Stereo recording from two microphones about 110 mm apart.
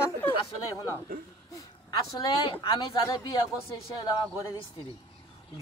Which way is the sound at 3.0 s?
40° left (ahead or behind).